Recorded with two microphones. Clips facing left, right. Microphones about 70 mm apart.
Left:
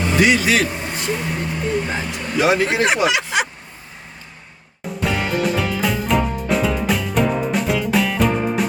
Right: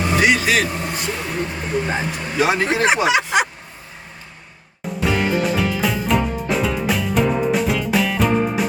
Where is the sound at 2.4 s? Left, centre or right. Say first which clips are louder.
Left 1 dB; right.